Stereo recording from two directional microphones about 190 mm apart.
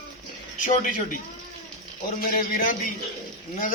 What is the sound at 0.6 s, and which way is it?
Speech, 40° left (ahead or behind).